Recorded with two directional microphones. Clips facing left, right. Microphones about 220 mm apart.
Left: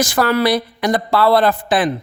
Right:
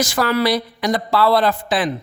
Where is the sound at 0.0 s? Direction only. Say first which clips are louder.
Left 2 dB; 50° left (ahead or behind).